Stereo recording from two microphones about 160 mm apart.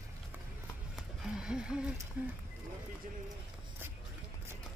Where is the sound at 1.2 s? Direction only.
5° right (ahead or behind).